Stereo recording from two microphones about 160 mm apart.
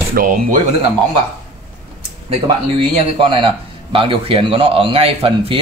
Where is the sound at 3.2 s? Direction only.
30° right (ahead or behind).